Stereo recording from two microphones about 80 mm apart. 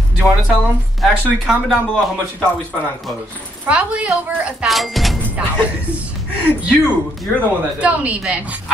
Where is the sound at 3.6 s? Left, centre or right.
Centre.